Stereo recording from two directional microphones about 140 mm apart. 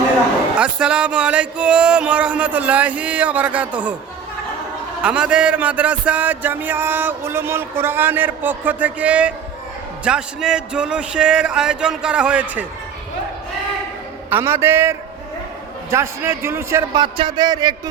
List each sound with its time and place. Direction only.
0.6 s music: 5° right (ahead or behind)
5.0 s music: 10° right (ahead or behind)
14.3 s music: 15° right (ahead or behind)
15.9 s a man's voice: 20° right (ahead or behind)
17.0 s a man's voice: 35° right (ahead or behind)